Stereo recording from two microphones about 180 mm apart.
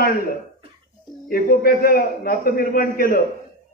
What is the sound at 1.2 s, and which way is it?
A man's voice, 55° left (ahead or behind).